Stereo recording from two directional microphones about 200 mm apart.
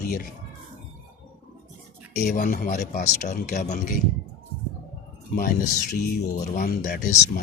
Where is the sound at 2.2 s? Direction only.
45° left (ahead or behind).